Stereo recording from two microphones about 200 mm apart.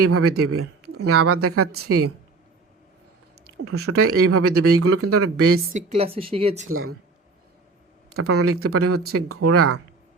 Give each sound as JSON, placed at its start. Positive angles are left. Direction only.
{"t": 0.0, "sound": "speech", "side_deg": -90}
{"t": 3.6, "sound": "speech", "side_deg": -90}
{"t": 5.7, "sound": "speech", "side_deg": -35}
{"t": 6.7, "sound": "speech", "side_deg": -90}
{"t": 8.1, "sound": "speech", "side_deg": -90}